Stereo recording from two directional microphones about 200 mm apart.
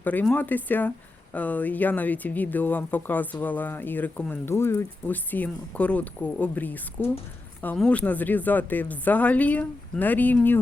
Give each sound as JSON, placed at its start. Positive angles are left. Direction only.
{"t": 0.0, "sound": "speech", "side_deg": 10}